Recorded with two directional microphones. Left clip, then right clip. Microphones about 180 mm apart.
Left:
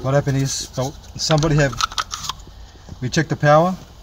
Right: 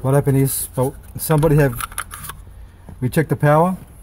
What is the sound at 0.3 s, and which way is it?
Speech, 40° right (ahead or behind).